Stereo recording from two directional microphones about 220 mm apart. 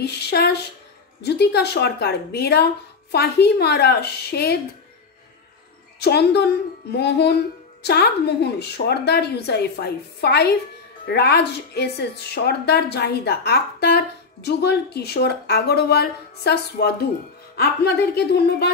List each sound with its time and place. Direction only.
0.0 s a woman's voice: 50° left (ahead or behind)
5.9 s a woman's voice: 45° left (ahead or behind)